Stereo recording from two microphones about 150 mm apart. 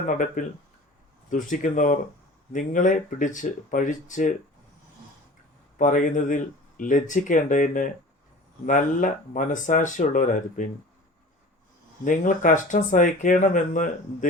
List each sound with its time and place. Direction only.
0.1 s speech: 65° left (ahead or behind)
5.7 s speech: 60° left (ahead or behind)
12.0 s speech: 60° left (ahead or behind)